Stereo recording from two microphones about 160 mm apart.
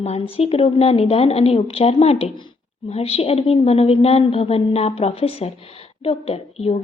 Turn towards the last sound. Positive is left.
turn(degrees=40)  # may be behind; listen again after turning